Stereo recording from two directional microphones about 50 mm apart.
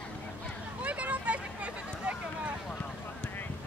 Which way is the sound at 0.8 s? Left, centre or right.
Right.